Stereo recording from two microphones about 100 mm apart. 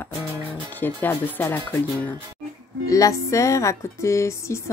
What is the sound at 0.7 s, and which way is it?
Speech, 20° left (ahead or behind).